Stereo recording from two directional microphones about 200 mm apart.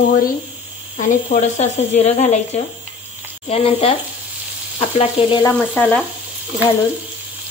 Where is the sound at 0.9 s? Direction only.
40° left (ahead or behind).